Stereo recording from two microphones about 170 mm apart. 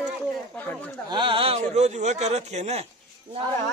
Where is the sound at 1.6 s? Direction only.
40° right (ahead or behind).